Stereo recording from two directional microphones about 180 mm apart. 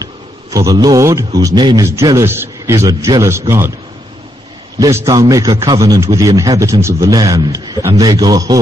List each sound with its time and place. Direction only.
0.0 s a man's voice: 20° right (ahead or behind)
4.7 s speech: 20° right (ahead or behind)